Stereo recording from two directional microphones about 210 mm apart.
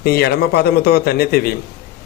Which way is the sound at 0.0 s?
50° left (ahead or behind).